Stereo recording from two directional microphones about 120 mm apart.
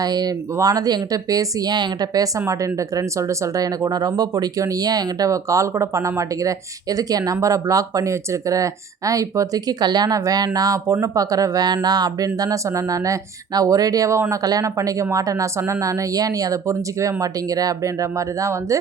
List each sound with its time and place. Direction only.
0.0 s speech: 35° right (ahead or behind)